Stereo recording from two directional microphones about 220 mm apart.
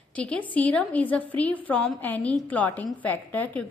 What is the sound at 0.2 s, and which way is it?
A woman's voice, 5° left (ahead or behind).